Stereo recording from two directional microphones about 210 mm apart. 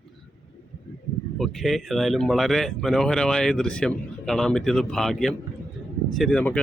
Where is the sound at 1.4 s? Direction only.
Centre (ahead or behind).